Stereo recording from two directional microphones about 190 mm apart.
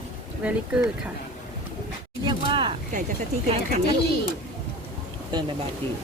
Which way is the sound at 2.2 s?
25° right (ahead or behind).